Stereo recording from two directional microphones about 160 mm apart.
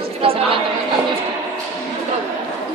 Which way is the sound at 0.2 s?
35° right (ahead or behind).